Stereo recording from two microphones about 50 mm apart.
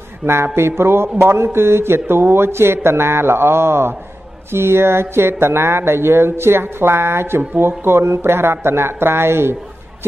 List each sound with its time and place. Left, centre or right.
0.2 s speech: right
0.6 s a sound: right
1.3 s speech: right